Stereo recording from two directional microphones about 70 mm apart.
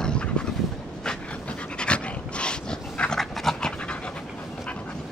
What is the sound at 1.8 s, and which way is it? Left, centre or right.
Dog, centre.